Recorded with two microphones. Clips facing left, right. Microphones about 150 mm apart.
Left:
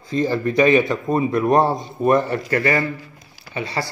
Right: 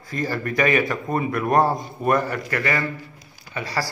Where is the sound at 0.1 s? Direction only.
20° left (ahead or behind).